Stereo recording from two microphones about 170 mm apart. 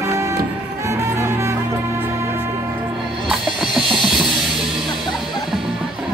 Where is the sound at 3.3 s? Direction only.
5° right (ahead or behind).